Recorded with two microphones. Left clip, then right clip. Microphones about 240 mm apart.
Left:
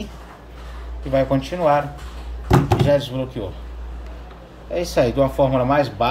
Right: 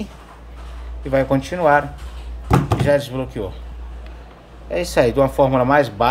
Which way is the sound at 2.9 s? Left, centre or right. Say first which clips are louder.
Right 4 dB; centre.